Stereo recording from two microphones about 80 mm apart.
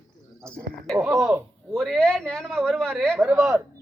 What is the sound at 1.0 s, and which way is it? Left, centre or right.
Speech, centre.